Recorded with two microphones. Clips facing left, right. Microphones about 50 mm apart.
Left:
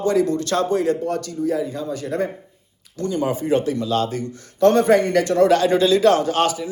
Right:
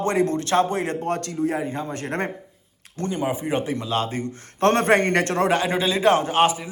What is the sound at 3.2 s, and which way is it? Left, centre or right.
A man's voice, centre.